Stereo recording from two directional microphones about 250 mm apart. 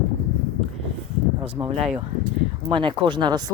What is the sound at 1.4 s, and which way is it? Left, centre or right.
Speech, right.